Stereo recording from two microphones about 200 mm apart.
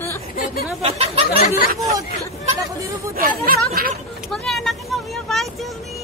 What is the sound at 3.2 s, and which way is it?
Speech, 45° right (ahead or behind).